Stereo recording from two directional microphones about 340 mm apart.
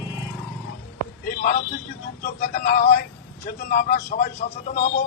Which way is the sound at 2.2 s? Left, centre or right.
Left.